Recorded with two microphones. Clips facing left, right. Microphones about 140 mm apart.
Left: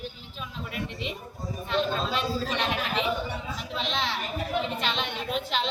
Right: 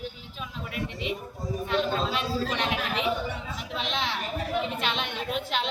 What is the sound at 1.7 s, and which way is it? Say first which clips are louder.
Speech: even; 5° right (ahead or behind).